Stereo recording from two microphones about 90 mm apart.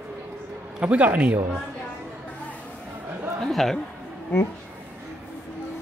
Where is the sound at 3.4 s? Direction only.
5° left (ahead or behind).